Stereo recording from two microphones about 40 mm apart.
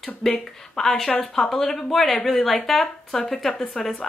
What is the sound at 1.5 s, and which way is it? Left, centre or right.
A woman's voice, centre.